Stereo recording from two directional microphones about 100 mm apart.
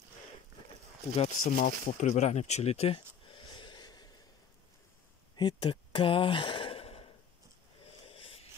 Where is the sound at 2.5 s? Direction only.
90° left.